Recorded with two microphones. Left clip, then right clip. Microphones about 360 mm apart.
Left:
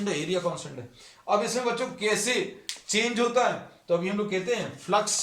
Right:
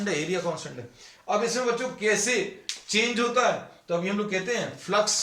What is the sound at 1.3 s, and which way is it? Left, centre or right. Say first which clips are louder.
Speech: even; centre.